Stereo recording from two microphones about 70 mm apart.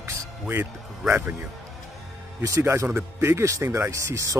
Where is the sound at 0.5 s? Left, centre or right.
Right.